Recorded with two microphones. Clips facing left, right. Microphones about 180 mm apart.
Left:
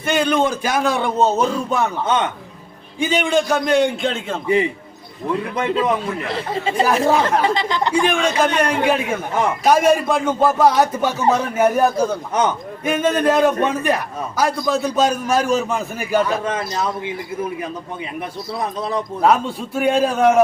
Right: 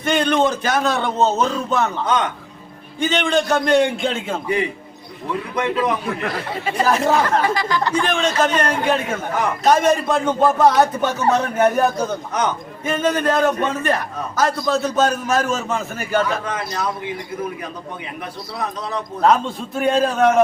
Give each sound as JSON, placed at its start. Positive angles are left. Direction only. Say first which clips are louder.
{"t": 0.0, "sound": "a man's voice", "louder": "even", "side_deg": 5}
{"t": 2.0, "sound": "speech", "louder": "left 2 dB", "side_deg": 25}
{"t": 3.0, "sound": "a man's voice", "louder": "left 1 dB", "side_deg": 10}
{"t": 5.5, "sound": "speech", "louder": "even", "side_deg": 25}
{"t": 7.1, "sound": "a man's voice", "louder": "left 1 dB", "side_deg": 15}
{"t": 16.4, "sound": "speech", "louder": "left 2 dB", "side_deg": 25}
{"t": 19.2, "sound": "a man's voice", "louder": "right 1 dB", "side_deg": 10}